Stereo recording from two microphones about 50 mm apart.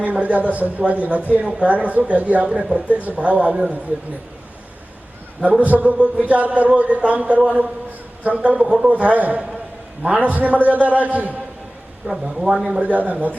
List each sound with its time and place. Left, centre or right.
0.0 s speech: right
5.4 s speech: right
8.6 s speech: centre
8.9 s a man's voice: right
12.0 s speech: centre
12.8 s a man's voice: right